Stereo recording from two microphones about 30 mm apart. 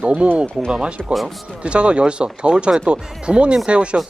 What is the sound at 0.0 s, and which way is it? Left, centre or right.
Speech, right.